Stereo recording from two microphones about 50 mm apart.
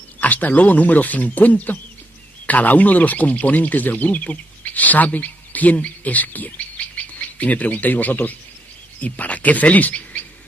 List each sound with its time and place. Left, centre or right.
0.2 s speech: left